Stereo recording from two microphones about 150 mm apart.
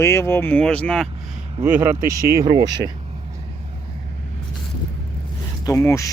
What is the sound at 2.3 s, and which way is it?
Speech, 30° right (ahead or behind).